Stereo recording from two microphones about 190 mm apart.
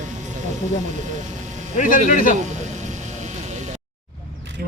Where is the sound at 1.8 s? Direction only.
40° left (ahead or behind).